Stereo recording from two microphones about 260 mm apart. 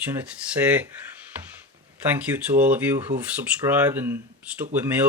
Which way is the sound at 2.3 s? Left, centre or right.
Centre.